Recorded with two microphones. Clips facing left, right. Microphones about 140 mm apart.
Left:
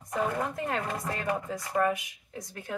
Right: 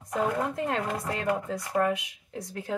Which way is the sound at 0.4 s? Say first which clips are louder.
Right 2 dB; 20° right (ahead or behind).